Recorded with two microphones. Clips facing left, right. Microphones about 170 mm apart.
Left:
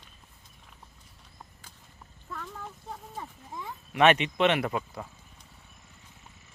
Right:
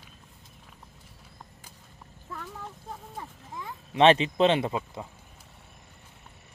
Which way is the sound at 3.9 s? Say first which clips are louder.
Right 2 dB; 30° right (ahead or behind).